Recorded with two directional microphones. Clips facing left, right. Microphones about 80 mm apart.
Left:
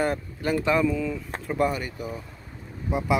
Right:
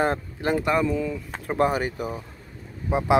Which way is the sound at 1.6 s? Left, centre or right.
Right.